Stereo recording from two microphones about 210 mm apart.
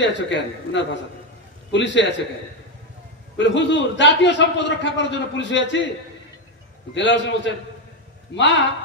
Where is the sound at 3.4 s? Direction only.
60° left (ahead or behind).